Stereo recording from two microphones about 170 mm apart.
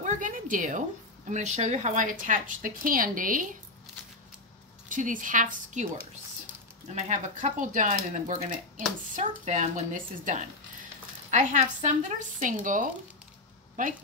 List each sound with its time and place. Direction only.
0.0 s a woman's voice: 50° right (ahead or behind)
4.8 s a woman's voice: 50° right (ahead or behind)
7.0 s a woman's voice: 45° right (ahead or behind)